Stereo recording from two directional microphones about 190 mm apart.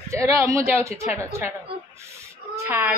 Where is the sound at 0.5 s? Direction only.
15° right (ahead or behind).